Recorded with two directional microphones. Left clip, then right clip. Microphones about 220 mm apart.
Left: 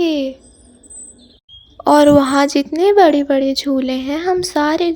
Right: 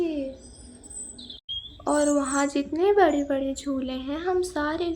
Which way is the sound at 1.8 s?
35° left (ahead or behind).